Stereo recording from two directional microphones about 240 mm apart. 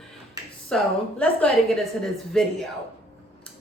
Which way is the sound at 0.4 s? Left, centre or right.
Centre.